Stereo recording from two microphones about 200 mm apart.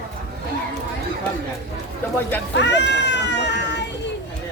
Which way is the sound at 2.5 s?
60° left (ahead or behind).